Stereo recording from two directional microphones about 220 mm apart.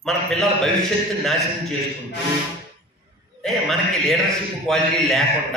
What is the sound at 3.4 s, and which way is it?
A man's voice, centre (ahead or behind).